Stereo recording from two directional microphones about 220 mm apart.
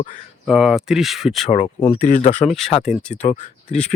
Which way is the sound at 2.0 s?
35° left (ahead or behind).